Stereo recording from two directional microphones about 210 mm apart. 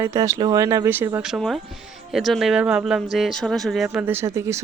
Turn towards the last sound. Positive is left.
turn(degrees=-15)  # may be behind; listen again after turning